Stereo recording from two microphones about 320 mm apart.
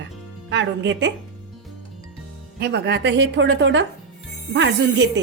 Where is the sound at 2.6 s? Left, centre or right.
Right.